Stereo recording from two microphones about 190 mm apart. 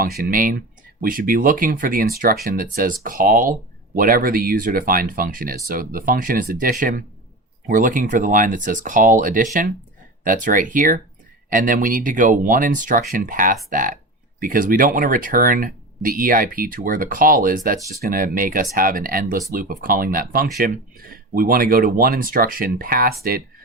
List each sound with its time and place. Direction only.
0.0 s speech: 45° right (ahead or behind)